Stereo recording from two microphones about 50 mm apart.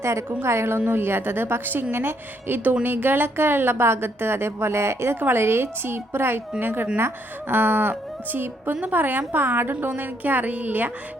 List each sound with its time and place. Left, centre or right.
0.0 s a woman's voice: right
0.4 s a woman's voice: right
0.9 s a woman's voice: right
5.2 s a woman's voice: right
8.7 s a woman's voice: right